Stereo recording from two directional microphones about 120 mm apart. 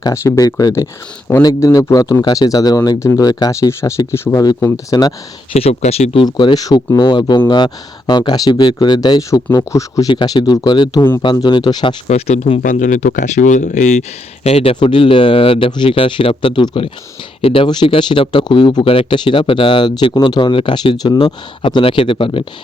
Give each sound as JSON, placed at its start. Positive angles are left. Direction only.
{"t": 0.0, "sound": "speech", "side_deg": 30}
{"t": 5.5, "sound": "speech", "side_deg": 60}
{"t": 6.2, "sound": "speech", "side_deg": 35}
{"t": 10.1, "sound": "speech", "side_deg": 40}
{"t": 12.0, "sound": "speech", "side_deg": 65}
{"t": 14.4, "sound": "speech", "side_deg": 55}